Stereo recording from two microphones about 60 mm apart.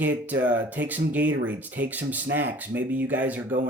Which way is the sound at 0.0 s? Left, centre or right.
Right.